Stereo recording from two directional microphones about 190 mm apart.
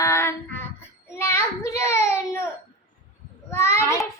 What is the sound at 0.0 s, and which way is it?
Child singing, 15° left (ahead or behind).